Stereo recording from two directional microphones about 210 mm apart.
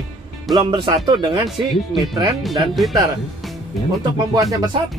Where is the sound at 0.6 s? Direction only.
20° right (ahead or behind).